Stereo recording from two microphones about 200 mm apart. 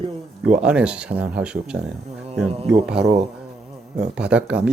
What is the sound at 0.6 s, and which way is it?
Speech, 5° right (ahead or behind).